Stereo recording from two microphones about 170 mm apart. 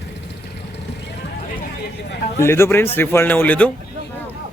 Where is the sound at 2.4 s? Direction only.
15° left (ahead or behind).